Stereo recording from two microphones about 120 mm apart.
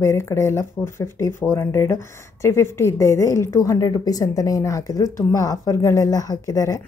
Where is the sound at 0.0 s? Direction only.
25° left (ahead or behind).